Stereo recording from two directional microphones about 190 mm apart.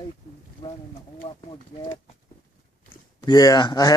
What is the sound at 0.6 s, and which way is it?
Speech, 25° left (ahead or behind).